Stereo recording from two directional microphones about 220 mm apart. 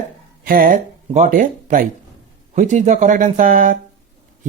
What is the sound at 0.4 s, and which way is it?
Speech, 40° right (ahead or behind).